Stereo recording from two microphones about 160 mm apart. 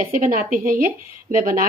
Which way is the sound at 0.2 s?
60° right (ahead or behind).